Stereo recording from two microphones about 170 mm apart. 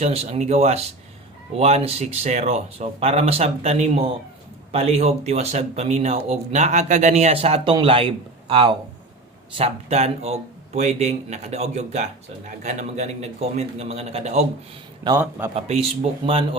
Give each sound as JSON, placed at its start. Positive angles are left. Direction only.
{"t": 0.0, "sound": "speech", "side_deg": -40}
{"t": 15.5, "sound": "speech", "side_deg": -40}